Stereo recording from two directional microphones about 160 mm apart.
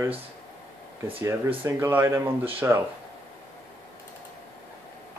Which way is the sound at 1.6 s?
15° right (ahead or behind).